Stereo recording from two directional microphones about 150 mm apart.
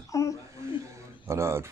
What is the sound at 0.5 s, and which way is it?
Speech, 20° right (ahead or behind).